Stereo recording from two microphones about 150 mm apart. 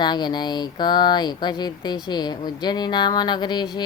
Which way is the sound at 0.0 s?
30° left (ahead or behind).